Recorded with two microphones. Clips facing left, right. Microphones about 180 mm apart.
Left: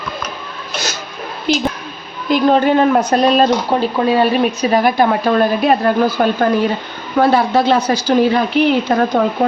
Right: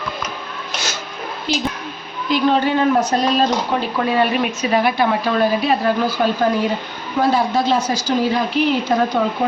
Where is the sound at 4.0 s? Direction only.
30° left (ahead or behind); by 6.3 s 55° left (ahead or behind).